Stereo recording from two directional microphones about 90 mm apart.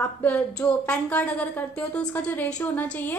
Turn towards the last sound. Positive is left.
turn(degrees=20)  # may be behind; listen again after turning